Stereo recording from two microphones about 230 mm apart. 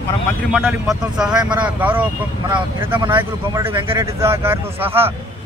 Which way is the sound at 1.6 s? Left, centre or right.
Centre.